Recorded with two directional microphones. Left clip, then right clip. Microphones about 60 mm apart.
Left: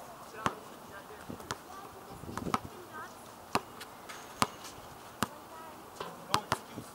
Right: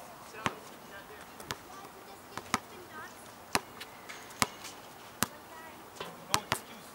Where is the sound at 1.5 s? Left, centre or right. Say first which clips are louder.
Even; centre.